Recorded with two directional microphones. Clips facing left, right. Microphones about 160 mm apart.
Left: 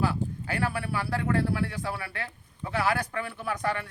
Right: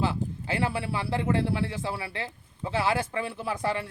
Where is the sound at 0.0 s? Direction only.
25° right (ahead or behind).